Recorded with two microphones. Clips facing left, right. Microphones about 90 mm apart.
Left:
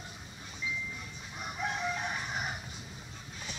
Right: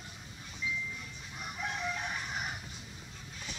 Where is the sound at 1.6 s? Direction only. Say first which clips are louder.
Left 3 dB; 20° left (ahead or behind).